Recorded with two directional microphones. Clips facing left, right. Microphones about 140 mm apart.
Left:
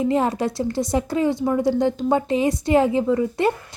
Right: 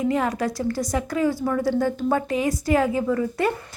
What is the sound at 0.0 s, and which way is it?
A woman's voice, 30° left (ahead or behind).